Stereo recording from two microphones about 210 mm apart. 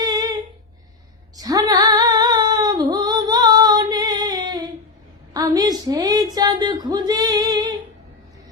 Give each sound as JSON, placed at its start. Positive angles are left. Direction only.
{"t": 0.0, "sound": "humming", "side_deg": -20}
{"t": 1.4, "sound": "female singing", "side_deg": -15}
{"t": 5.3, "sound": "a sound", "side_deg": -15}